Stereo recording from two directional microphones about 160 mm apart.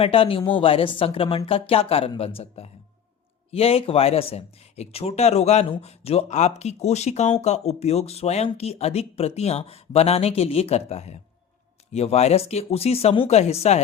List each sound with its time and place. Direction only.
0.0 s speech: 35° left (ahead or behind)